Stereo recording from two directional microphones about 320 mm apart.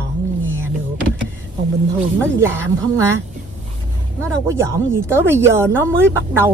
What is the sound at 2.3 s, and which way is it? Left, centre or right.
Speech, centre.